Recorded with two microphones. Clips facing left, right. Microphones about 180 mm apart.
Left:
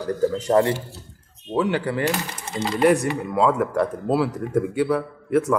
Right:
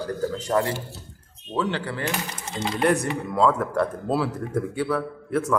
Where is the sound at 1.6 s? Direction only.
10° left (ahead or behind).